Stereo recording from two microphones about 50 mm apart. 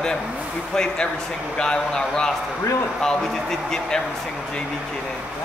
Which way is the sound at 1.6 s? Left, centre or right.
Centre.